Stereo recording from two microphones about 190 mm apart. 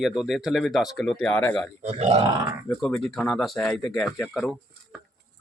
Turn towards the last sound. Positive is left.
turn(degrees=0)  # may be behind; listen again after turning